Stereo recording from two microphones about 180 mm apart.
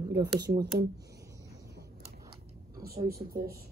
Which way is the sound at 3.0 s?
55° right (ahead or behind).